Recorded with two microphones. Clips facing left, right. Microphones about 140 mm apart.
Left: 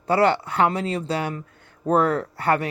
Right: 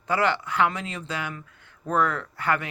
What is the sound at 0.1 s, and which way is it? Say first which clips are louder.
Speech: left 5 dB; 35° left (ahead or behind).